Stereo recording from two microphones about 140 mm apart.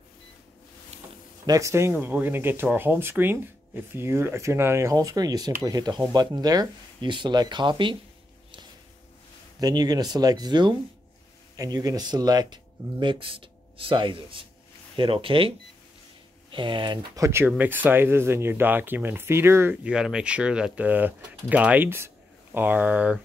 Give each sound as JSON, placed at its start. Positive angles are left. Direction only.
{"t": 1.4, "sound": "speech", "side_deg": -25}
{"t": 9.6, "sound": "speech", "side_deg": -25}